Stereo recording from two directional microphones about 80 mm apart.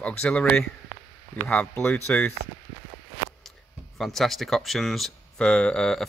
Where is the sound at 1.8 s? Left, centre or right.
Centre.